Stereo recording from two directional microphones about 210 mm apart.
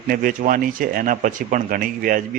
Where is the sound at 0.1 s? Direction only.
40° right (ahead or behind).